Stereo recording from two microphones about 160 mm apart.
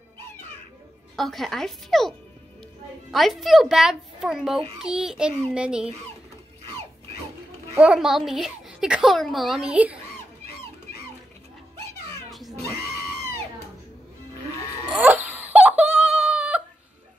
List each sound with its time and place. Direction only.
1.1 s a child's voice: centre (ahead or behind)
7.8 s a child's voice: 5° right (ahead or behind)
12.3 s music: centre (ahead or behind)
14.9 s a sound: 10° right (ahead or behind)